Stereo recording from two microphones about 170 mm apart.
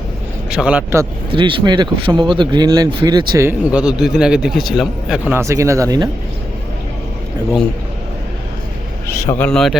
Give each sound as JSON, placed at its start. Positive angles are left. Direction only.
{"t": 0.5, "sound": "speech", "side_deg": -5}
{"t": 1.3, "sound": "speech", "side_deg": -30}
{"t": 3.7, "sound": "a man's voice", "side_deg": -5}
{"t": 5.3, "sound": "speech", "side_deg": -15}
{"t": 9.0, "sound": "speech", "side_deg": 15}
{"t": 9.5, "sound": "a man's voice", "side_deg": 0}